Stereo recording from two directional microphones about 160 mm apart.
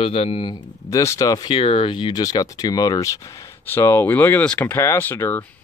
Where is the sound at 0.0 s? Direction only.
40° left (ahead or behind); by 5.4 s 15° left (ahead or behind).